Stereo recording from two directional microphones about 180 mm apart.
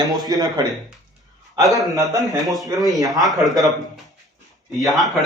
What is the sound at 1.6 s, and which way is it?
A man's voice, centre (ahead or behind).